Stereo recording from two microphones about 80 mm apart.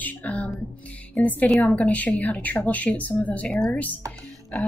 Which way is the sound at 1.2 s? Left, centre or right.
Centre.